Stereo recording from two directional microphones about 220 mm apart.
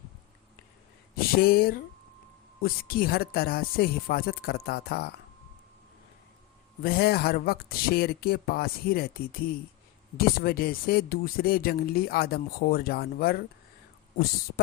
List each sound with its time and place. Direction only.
1.1 s speech: 45° left (ahead or behind)
6.8 s speech: 45° left (ahead or behind)